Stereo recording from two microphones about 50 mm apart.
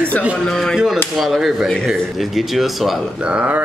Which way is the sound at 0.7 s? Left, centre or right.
Centre.